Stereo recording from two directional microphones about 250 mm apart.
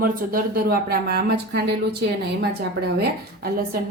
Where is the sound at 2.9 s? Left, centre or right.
Right.